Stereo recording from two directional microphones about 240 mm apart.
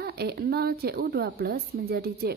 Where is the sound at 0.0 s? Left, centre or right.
Right.